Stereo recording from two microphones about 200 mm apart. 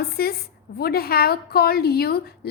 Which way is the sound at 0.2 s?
50° left (ahead or behind).